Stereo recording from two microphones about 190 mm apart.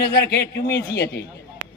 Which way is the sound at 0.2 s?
55° left (ahead or behind).